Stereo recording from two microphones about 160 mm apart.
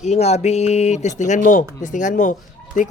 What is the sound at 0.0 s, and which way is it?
Speech, 45° left (ahead or behind).